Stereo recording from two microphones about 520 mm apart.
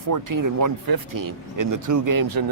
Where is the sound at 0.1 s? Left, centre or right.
Right.